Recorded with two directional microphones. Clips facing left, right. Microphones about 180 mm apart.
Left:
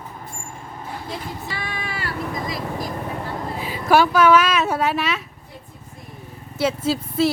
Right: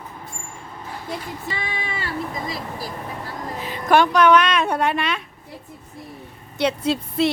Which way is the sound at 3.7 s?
5° left (ahead or behind).